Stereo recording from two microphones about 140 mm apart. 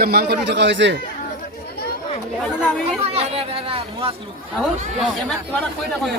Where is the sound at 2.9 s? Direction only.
45° right (ahead or behind).